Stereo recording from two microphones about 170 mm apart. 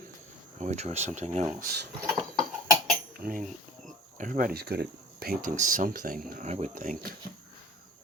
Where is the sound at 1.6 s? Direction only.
75° right (ahead or behind).